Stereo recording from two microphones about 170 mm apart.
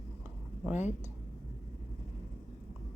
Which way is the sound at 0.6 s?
10° right (ahead or behind).